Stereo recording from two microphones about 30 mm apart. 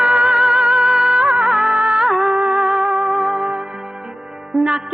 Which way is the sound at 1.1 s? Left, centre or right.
Right.